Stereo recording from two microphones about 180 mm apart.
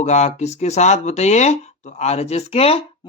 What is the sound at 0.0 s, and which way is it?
Speech, 40° left (ahead or behind).